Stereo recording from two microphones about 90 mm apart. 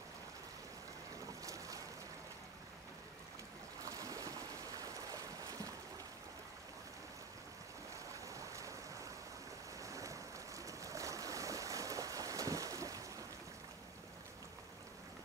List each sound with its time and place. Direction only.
1.4 s boat: 40° right (ahead or behind)
3.8 s boat: 40° right (ahead or behind)
7.9 s waves: 35° right (ahead or behind)
9.8 s boat: 35° right (ahead or behind)